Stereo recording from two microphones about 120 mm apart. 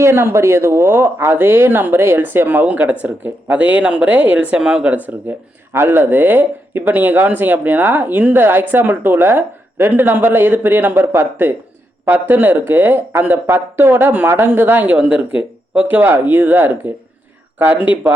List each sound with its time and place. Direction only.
0.0 s speech: 20° right (ahead or behind)